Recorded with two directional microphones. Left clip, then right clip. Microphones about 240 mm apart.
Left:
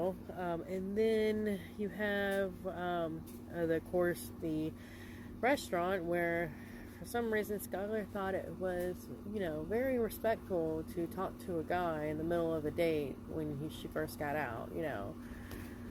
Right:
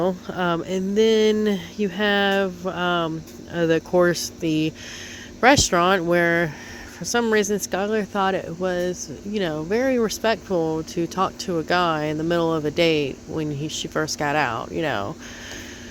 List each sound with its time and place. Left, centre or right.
0.0 s speech: right